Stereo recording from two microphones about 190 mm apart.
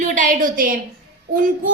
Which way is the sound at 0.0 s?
45° right (ahead or behind).